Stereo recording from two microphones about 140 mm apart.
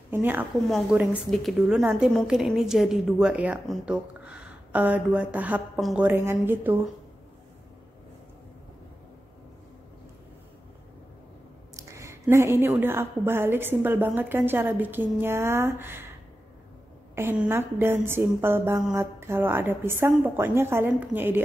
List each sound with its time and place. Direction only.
0.1 s a woman's voice: 15° right (ahead or behind)
0.7 s a woman's voice: centre (ahead or behind)
5.8 s a woman's voice: centre (ahead or behind)
6.0 s a woman's voice: 15° right (ahead or behind)
11.7 s a woman's voice: 20° right (ahead or behind)
17.1 s a woman's voice: 15° right (ahead or behind)